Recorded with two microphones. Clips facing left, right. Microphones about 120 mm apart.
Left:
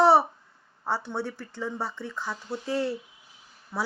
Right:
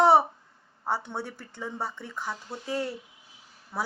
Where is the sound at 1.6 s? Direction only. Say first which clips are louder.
Left 2 dB; 20° right (ahead or behind).